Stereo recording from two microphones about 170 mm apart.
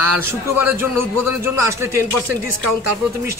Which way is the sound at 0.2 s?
15° right (ahead or behind).